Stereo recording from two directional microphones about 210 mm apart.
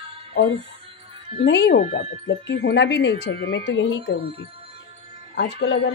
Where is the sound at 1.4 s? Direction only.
55° left (ahead or behind).